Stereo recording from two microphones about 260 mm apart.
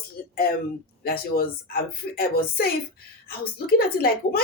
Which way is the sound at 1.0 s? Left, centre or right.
Left.